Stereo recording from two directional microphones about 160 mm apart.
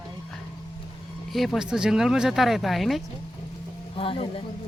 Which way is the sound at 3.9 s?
35° left (ahead or behind).